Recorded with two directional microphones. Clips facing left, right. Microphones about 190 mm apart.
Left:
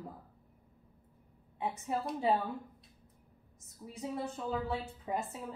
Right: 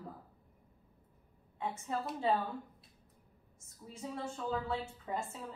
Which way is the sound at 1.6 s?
15° left (ahead or behind).